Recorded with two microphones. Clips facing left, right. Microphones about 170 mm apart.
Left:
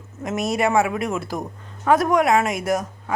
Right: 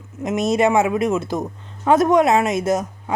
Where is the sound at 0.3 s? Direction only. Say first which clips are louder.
Right 4 dB; 20° right (ahead or behind).